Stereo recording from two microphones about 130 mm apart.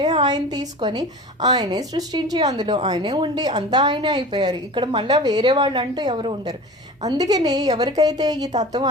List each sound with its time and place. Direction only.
0.0 s a woman's voice: 35° right (ahead or behind)